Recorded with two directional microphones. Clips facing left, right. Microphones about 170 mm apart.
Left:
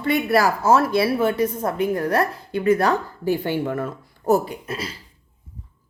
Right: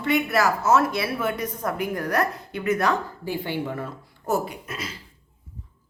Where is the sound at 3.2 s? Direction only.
45° left (ahead or behind).